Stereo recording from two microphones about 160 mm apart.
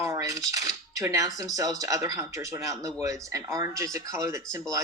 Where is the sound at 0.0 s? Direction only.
20° right (ahead or behind).